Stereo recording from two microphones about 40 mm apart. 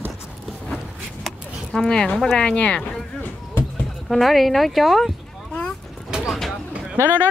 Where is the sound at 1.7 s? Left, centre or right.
Centre.